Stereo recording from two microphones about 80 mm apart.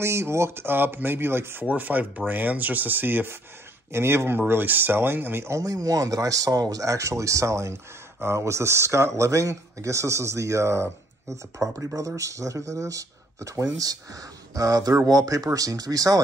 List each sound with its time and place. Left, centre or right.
0.0 s speech: right
5.6 s speech: right